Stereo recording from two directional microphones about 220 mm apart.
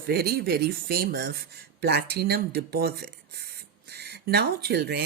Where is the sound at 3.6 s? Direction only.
45° right (ahead or behind).